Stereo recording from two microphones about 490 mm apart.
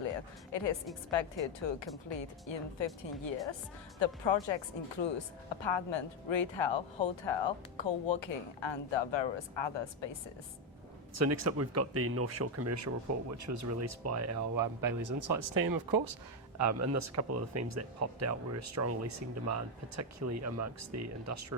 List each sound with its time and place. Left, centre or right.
0.5 s speech: left
4.0 s speech: left
11.1 s speech: right
16.6 s speech: right